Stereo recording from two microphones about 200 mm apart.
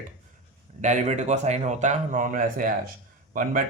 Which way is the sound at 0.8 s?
35° right (ahead or behind).